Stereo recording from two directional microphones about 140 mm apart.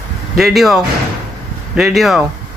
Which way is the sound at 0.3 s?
Centre (ahead or behind).